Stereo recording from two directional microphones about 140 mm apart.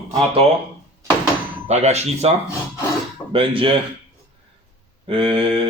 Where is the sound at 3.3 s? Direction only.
40° right (ahead or behind).